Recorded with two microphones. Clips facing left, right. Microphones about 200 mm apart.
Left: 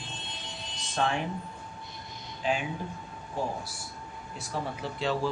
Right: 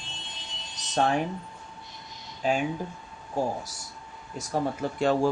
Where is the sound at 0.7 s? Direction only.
40° right (ahead or behind).